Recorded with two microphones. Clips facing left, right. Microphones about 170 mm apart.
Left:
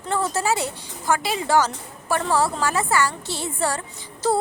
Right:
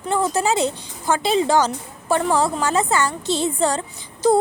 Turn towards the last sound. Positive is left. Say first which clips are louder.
# right 5 dB
turn(degrees=-15)  # may be behind; listen again after turning